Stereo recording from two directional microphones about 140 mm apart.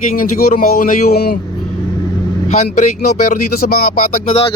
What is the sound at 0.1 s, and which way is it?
Speech, 85° left.